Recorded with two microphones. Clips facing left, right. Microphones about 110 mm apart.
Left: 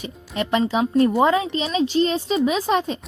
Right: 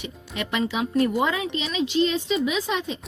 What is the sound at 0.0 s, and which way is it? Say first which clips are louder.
A woman's voice: left 5 dB; 35° left (ahead or behind).